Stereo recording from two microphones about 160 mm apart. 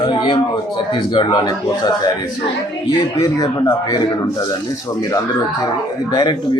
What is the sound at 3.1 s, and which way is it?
A man's voice, 25° left (ahead or behind).